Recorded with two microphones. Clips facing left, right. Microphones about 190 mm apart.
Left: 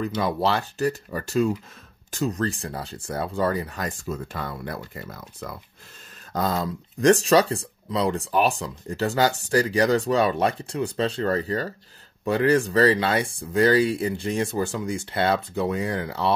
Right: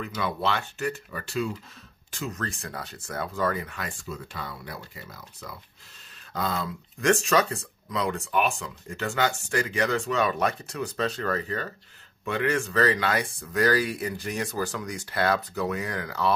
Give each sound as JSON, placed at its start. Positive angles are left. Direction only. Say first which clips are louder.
{"t": 0.0, "sound": "speech", "louder": "left 5 dB", "side_deg": 35}